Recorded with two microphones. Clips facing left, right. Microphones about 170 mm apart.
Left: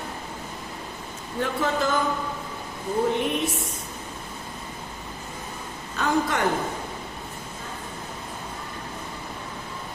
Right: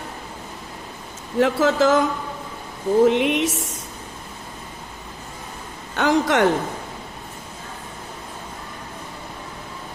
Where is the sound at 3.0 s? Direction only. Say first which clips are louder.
Right 6 dB; 80° right.